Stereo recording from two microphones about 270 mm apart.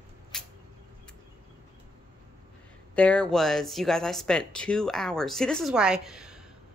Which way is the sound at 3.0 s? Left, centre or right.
Centre.